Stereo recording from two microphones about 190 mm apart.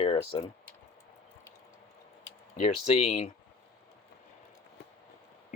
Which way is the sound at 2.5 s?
35° left (ahead or behind).